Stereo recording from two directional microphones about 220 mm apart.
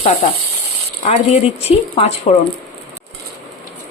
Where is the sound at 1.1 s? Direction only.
25° left (ahead or behind).